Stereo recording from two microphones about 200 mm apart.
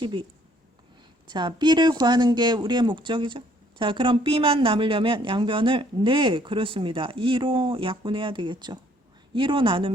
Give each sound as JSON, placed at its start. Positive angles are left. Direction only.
{"t": 0.0, "sound": "speech", "side_deg": -25}
{"t": 1.3, "sound": "speech", "side_deg": -20}